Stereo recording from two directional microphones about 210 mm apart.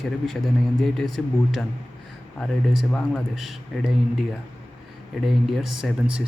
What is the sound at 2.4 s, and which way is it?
Speech, centre (ahead or behind).